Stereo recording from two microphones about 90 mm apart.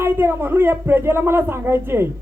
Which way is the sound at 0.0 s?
25° right (ahead or behind).